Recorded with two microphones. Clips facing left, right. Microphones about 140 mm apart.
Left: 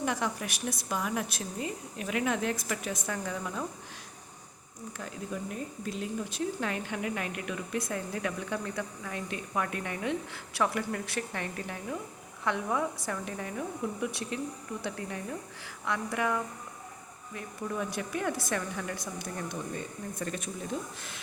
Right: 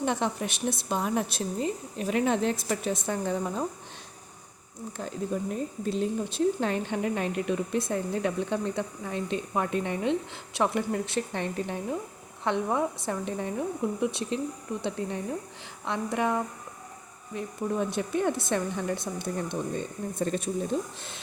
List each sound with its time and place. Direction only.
0.0 s speech: 25° right (ahead or behind)
4.9 s speech: 30° right (ahead or behind)